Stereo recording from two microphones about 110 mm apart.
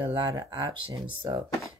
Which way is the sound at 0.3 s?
30° right (ahead or behind).